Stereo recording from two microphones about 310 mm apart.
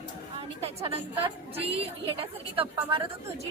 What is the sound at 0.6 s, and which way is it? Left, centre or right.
A woman's voice, centre.